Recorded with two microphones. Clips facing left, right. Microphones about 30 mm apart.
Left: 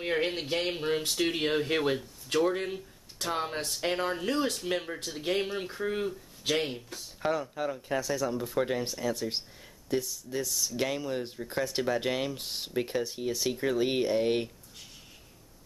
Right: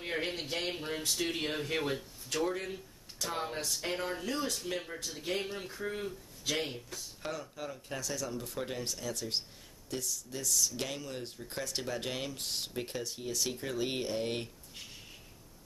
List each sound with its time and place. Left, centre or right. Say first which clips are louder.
0.0 s speech: left 6 dB; centre